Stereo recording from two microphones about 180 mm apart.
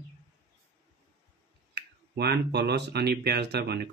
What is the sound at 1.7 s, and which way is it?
Speech, 65° right (ahead or behind).